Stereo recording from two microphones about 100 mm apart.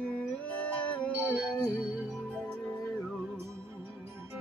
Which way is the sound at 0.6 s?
15° left (ahead or behind).